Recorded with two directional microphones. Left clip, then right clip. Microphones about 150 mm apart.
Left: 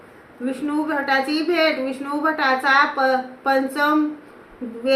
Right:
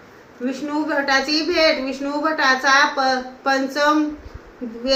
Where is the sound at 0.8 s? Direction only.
20° left (ahead or behind).